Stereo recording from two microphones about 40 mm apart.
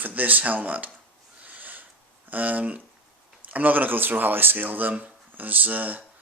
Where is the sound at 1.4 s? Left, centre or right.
Right.